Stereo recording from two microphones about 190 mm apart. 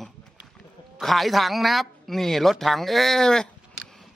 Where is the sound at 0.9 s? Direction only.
Centre (ahead or behind).